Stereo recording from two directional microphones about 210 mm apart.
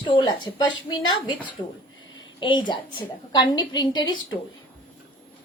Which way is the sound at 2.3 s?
20° left (ahead or behind).